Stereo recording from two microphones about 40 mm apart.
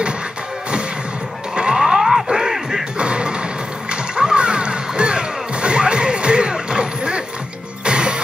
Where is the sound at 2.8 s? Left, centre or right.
Right.